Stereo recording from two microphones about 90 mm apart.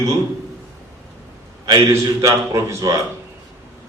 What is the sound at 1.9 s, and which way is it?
A man's voice, 35° right (ahead or behind).